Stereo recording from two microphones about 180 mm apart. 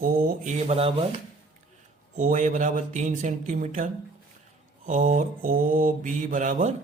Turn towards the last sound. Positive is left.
turn(degrees=-45)  # may be behind; listen again after turning